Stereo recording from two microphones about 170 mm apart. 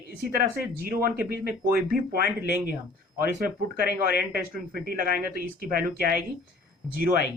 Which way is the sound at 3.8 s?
60° right (ahead or behind).